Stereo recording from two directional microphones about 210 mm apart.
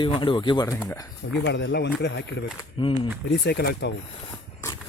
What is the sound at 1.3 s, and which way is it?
A man's voice, 55° left (ahead or behind).